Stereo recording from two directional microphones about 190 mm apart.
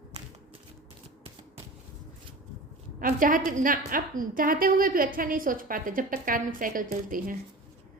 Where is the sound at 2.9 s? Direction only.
45° right (ahead or behind).